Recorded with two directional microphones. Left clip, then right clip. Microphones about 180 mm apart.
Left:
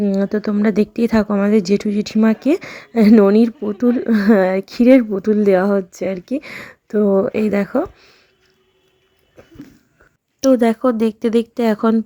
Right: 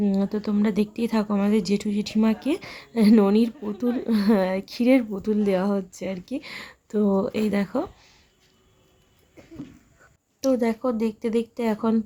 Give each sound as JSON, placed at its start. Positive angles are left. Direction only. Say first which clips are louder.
{"t": 0.0, "sound": "speech", "louder": "left 7 dB", "side_deg": 20}
{"t": 10.4, "sound": "speech", "louder": "left 9 dB", "side_deg": 30}